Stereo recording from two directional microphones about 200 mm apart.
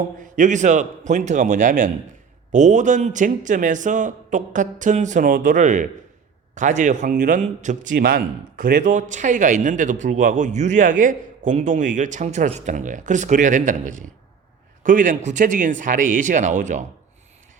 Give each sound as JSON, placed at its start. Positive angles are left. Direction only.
{"t": 0.2, "sound": "a man's voice", "side_deg": -40}
{"t": 7.9, "sound": "a man's voice", "side_deg": -50}